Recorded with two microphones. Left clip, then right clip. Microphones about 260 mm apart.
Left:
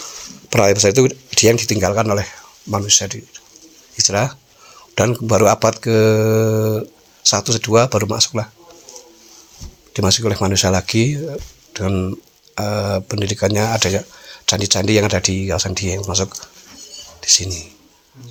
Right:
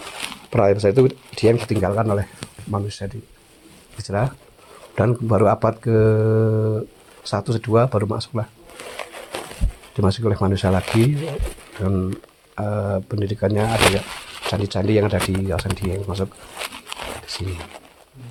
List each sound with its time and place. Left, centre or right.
0.5 s speech: left
9.9 s speech: left